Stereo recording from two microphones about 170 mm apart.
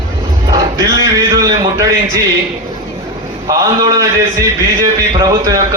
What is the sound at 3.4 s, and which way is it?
A man's voice, 20° right (ahead or behind).